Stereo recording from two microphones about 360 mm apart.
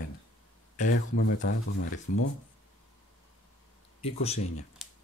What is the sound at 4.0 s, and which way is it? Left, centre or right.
Speech, centre.